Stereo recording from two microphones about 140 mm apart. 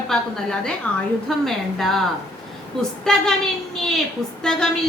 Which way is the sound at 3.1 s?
5° left (ahead or behind).